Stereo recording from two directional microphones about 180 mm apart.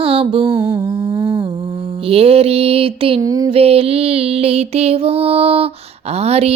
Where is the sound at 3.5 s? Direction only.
35° right (ahead or behind).